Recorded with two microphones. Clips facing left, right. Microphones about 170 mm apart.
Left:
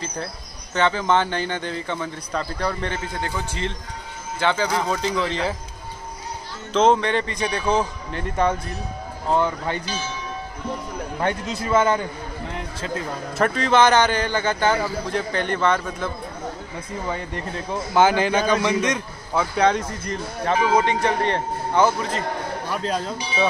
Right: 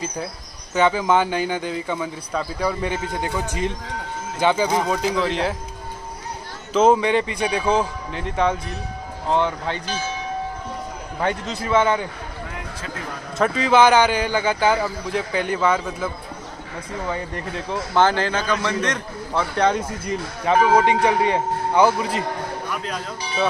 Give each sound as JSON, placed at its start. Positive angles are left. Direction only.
{"t": 0.7, "sound": "a man's voice", "side_deg": -10}
{"t": 6.7, "sound": "a man's voice", "side_deg": -5}
{"t": 11.2, "sound": "a man's voice", "side_deg": 0}
{"t": 13.4, "sound": "speech", "side_deg": -5}
{"t": 17.6, "sound": "a man's voice", "side_deg": 10}
{"t": 22.7, "sound": "speech", "side_deg": 30}